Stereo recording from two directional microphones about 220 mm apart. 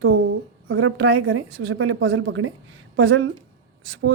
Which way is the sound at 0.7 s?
60° right (ahead or behind).